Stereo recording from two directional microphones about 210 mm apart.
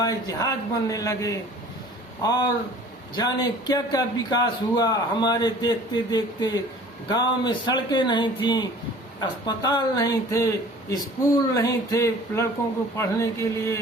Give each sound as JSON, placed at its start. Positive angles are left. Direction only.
{"t": 0.0, "sound": "a man's voice", "side_deg": 15}
{"t": 11.5, "sound": "a man's voice", "side_deg": 15}